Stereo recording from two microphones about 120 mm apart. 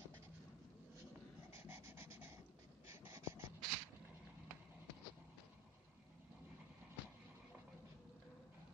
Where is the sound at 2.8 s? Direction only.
20° right (ahead or behind).